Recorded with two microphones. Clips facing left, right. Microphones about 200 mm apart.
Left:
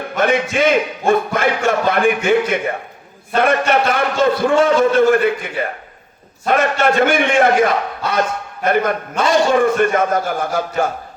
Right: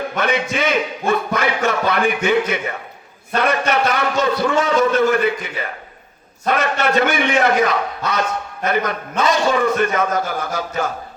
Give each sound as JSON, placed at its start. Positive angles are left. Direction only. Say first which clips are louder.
{"t": 0.2, "sound": "a man's voice", "louder": "left 5 dB", "side_deg": 50}